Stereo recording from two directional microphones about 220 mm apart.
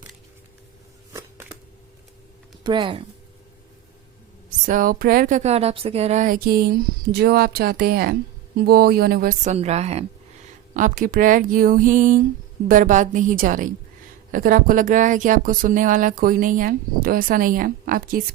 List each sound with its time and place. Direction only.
1.1 s a sound: 10° right (ahead or behind)
2.6 s speech: 20° right (ahead or behind)
4.6 s speech: 40° right (ahead or behind)